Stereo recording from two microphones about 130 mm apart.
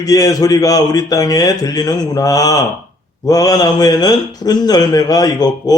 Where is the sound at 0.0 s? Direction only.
25° left (ahead or behind).